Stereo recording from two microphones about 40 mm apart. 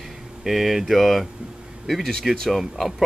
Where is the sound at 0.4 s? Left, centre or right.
Centre.